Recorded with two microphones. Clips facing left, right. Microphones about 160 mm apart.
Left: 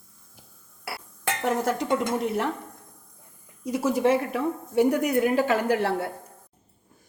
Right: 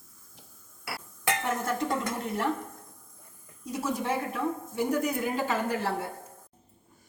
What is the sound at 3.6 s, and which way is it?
Speech, 90° left.